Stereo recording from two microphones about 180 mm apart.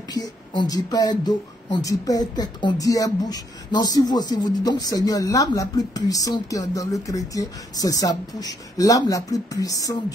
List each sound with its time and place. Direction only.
0.1 s speech: 25° left (ahead or behind)